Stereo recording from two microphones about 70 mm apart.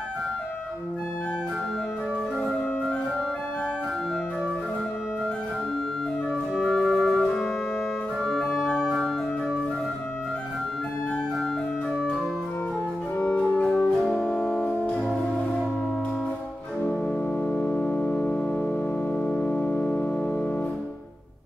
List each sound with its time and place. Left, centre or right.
6.5 s flute: centre
7.2 s music: centre
8.2 s organ: centre
13.2 s organ: centre
13.7 s music: centre
17.5 s organ: centre